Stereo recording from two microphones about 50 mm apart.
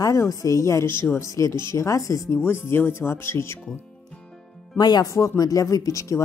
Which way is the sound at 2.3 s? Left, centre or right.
Left.